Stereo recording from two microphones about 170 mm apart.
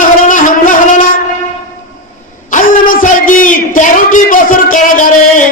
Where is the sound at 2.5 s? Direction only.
50° left (ahead or behind).